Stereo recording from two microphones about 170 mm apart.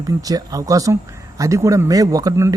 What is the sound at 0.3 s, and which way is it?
Speech, 20° right (ahead or behind).